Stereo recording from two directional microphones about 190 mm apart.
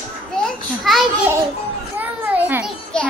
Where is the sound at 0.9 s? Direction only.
Centre (ahead or behind).